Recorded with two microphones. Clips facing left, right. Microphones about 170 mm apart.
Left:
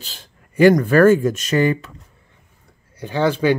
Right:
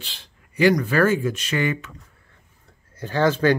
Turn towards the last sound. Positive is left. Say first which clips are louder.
# left 1 dB
turn(degrees=15)  # may be behind; listen again after turning